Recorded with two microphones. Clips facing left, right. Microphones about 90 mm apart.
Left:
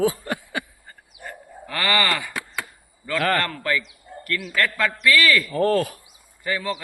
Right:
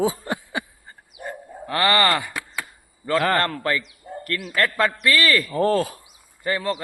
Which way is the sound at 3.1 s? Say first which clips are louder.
Right 2 dB; 25° right (ahead or behind).